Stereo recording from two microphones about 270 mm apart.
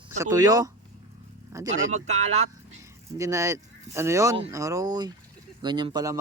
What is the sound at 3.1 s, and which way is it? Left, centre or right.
Speech, centre.